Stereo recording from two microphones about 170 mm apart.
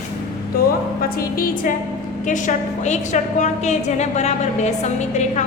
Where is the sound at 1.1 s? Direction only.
55° left (ahead or behind).